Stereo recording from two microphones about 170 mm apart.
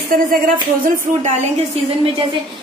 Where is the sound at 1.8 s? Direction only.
35° right (ahead or behind).